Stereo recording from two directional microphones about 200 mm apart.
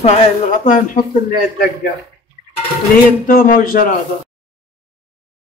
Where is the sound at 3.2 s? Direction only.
40° left (ahead or behind).